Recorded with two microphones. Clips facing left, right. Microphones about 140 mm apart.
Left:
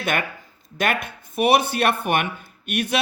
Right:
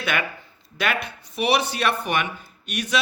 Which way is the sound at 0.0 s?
50° left (ahead or behind).